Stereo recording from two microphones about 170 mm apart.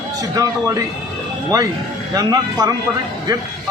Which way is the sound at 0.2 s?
20° right (ahead or behind).